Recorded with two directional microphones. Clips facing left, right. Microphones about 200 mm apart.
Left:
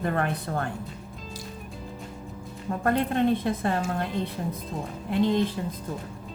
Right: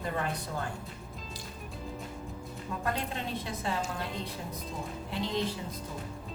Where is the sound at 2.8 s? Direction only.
55° left (ahead or behind).